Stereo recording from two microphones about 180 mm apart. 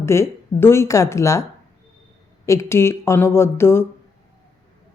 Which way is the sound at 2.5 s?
15° left (ahead or behind).